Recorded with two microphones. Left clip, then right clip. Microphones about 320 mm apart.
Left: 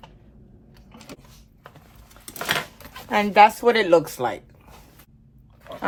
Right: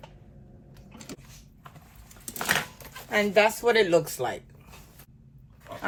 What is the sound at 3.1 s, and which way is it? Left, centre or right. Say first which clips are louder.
Speech: left 7 dB; left.